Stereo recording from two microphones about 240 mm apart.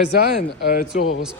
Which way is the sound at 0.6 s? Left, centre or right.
Left.